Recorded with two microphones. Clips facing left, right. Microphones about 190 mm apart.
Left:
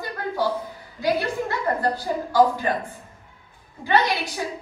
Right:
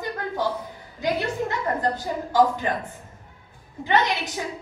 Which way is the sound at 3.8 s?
20° right (ahead or behind).